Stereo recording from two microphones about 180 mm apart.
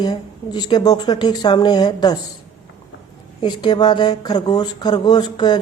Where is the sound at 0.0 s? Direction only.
20° left (ahead or behind).